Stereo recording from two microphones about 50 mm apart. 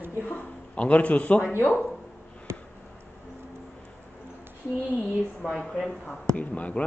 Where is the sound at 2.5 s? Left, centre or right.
Right.